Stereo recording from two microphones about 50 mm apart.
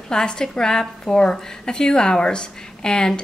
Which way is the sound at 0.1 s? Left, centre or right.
Centre.